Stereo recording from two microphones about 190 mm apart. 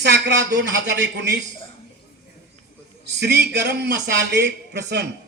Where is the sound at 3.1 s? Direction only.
60° right (ahead or behind).